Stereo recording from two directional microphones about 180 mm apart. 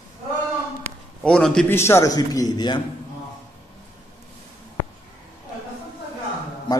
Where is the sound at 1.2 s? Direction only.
5° left (ahead or behind); by 2.8 s 25° left (ahead or behind).